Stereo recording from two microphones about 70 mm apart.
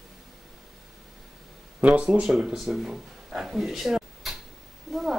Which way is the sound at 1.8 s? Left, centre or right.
Centre.